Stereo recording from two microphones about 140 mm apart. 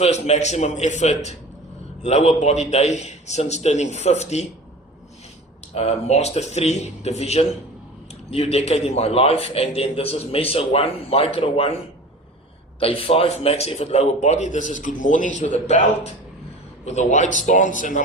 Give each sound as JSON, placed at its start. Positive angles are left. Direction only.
{"t": 0.0, "sound": "a man's voice", "side_deg": 50}
{"t": 5.7, "sound": "a man's voice", "side_deg": 50}
{"t": 12.8, "sound": "a man's voice", "side_deg": 40}